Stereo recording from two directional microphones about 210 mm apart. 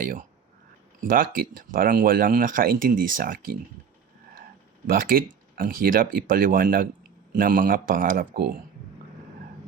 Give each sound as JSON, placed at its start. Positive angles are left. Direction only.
{"t": 0.0, "sound": "speech", "side_deg": -40}
{"t": 4.9, "sound": "speech", "side_deg": -45}